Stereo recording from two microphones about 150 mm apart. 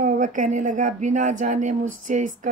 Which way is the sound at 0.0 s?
60° right (ahead or behind).